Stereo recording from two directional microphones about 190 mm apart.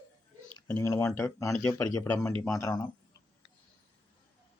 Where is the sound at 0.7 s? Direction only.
15° left (ahead or behind).